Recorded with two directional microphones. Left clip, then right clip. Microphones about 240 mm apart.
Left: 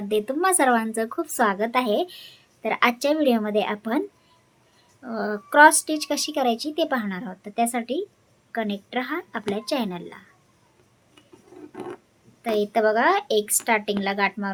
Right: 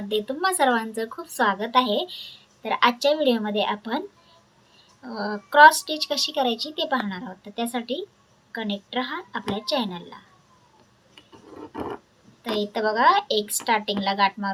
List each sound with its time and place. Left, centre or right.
0.1 s a woman's voice: left
5.0 s a woman's voice: left
12.7 s a woman's voice: left